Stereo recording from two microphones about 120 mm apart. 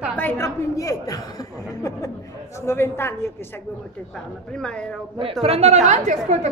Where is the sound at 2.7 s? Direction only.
20° left (ahead or behind).